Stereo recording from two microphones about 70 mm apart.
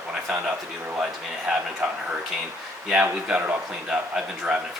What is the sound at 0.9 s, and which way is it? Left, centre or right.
Speech, centre.